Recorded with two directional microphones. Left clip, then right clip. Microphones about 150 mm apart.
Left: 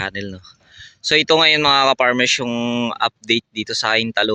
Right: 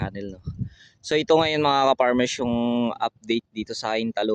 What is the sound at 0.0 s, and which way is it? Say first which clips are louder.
Speech: left 8 dB; 10° right (ahead or behind).